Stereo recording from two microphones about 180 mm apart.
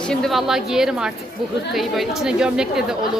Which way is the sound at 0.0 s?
5° left (ahead or behind).